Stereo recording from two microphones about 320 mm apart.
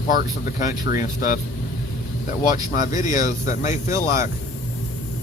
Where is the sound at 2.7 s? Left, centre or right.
Left.